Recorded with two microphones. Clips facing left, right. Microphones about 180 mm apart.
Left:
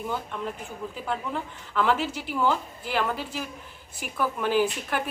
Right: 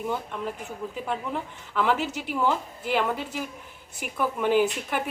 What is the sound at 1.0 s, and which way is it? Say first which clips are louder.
A man's voice: left 1 dB; 15° right (ahead or behind).